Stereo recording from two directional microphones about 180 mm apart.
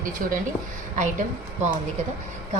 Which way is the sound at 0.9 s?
45° right (ahead or behind).